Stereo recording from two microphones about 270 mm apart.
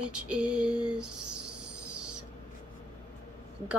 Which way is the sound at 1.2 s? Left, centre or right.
Right.